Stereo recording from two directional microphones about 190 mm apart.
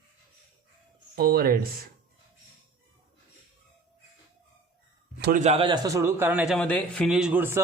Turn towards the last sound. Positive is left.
turn(degrees=-10)  # may be behind; listen again after turning